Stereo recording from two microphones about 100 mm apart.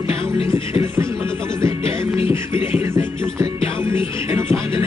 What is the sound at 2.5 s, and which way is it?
Music, 25° right (ahead or behind).